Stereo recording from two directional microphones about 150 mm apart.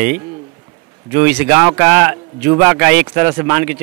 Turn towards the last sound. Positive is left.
turn(degrees=-15)  # may be behind; listen again after turning